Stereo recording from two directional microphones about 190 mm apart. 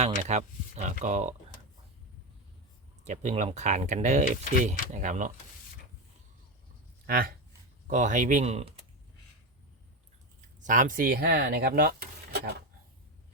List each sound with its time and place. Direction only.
0.0 s speech: 35° right (ahead or behind)
3.1 s speech: 40° right (ahead or behind)
7.1 s speech: 50° right (ahead or behind)
10.6 s speech: 45° right (ahead or behind)